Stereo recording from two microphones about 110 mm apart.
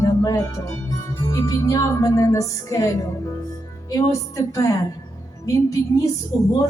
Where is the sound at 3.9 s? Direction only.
30° left (ahead or behind).